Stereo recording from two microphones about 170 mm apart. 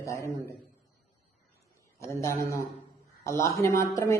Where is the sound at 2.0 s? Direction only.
15° left (ahead or behind).